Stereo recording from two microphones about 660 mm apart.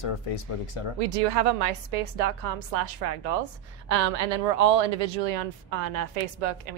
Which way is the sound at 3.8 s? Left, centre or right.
Right.